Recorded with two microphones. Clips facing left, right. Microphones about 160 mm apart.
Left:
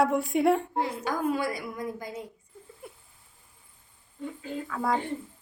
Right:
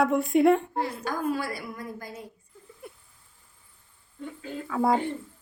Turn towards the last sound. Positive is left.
turn(degrees=-25)  # may be behind; listen again after turning